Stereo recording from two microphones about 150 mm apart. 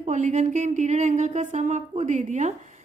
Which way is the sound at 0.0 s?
50° right (ahead or behind).